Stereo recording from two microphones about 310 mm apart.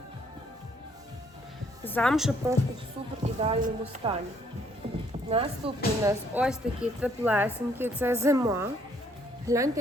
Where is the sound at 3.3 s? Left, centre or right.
Right.